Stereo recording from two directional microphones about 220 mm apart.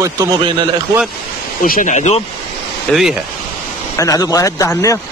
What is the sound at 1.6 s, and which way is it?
Speech, 35° left (ahead or behind).